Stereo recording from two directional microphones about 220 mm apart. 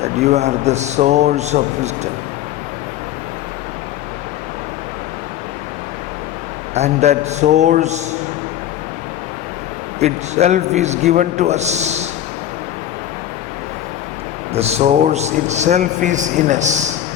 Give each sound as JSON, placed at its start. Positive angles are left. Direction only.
{"t": 0.0, "sound": "a man's voice", "side_deg": -30}
{"t": 6.7, "sound": "a man's voice", "side_deg": -30}
{"t": 10.0, "sound": "a man's voice", "side_deg": -30}
{"t": 14.5, "sound": "a man's voice", "side_deg": -30}